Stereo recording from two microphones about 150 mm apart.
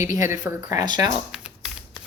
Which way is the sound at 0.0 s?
60° left (ahead or behind).